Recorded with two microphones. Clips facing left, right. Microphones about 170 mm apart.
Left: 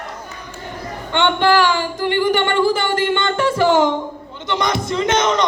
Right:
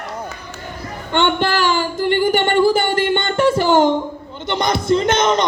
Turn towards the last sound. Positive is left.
turn(degrees=-35)  # may be behind; listen again after turning